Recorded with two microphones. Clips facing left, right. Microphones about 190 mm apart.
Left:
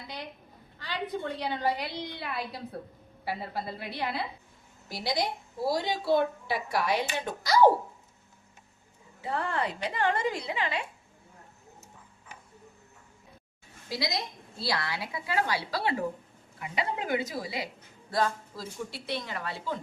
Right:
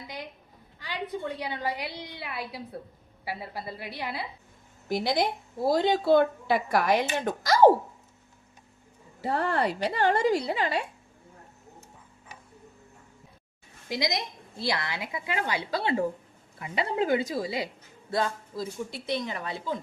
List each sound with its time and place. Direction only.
0.8 s a woman's voice: 15° right (ahead or behind)
4.9 s a woman's voice: 50° right (ahead or behind)
9.2 s a woman's voice: 40° right (ahead or behind)
13.9 s a woman's voice: 20° right (ahead or behind)